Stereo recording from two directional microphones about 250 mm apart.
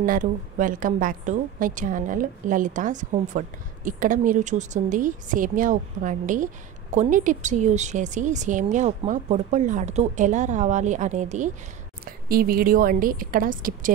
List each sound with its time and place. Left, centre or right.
0.0 s a woman's voice: right